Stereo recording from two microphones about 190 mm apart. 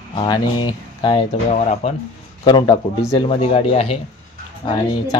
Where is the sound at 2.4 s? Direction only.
25° left (ahead or behind).